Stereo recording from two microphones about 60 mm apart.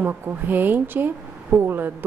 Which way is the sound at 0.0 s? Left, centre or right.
Right.